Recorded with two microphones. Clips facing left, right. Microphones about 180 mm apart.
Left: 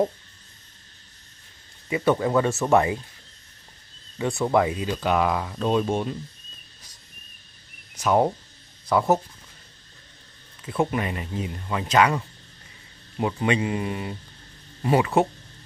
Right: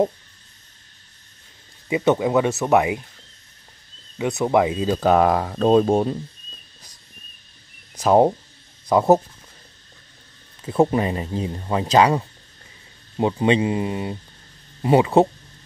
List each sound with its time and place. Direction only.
1.9 s speech: 20° right (ahead or behind)
4.2 s speech: 20° right (ahead or behind)
4.8 s speech: 40° right (ahead or behind)
8.0 s speech: 30° right (ahead or behind)
10.6 s speech: 30° right (ahead or behind)